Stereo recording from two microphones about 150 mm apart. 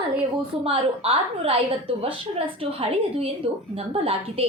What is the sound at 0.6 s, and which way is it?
A woman's voice, 40° right (ahead or behind).